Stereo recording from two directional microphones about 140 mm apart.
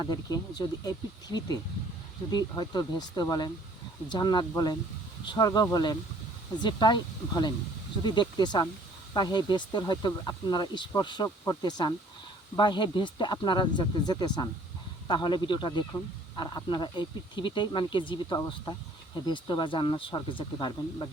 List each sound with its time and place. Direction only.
0.0 s a man's voice: 30° left (ahead or behind)